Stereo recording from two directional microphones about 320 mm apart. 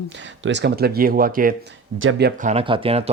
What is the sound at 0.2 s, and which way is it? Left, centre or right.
Speech, right.